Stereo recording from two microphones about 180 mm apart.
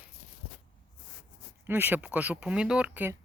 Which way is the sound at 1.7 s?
10° right (ahead or behind).